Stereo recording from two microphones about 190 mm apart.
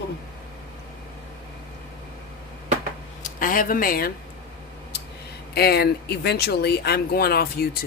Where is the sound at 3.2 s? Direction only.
45° left (ahead or behind).